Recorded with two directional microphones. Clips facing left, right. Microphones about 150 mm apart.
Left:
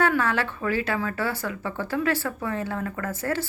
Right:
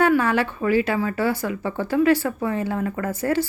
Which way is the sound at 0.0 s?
15° right (ahead or behind).